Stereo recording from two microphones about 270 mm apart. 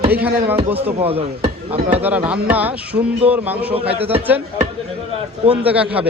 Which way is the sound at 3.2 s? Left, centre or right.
Centre.